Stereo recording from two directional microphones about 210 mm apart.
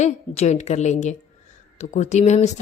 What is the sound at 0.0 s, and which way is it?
Speech, 35° left (ahead or behind).